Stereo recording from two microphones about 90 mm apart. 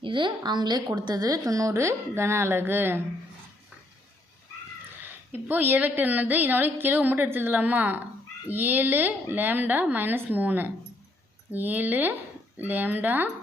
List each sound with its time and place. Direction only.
0.0 s a woman's voice: 65° right (ahead or behind); by 3.0 s 25° right (ahead or behind)
5.0 s a woman's voice: 20° right (ahead or behind)